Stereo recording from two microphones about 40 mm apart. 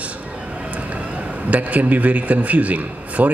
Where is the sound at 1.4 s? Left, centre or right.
Right.